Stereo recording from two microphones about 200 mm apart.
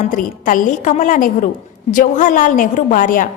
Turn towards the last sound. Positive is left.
turn(degrees=45)  # may be behind; listen again after turning